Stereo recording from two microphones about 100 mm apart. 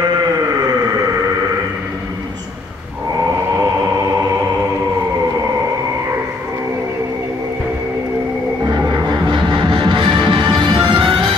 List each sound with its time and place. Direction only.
8.6 s music: 45° right (ahead or behind)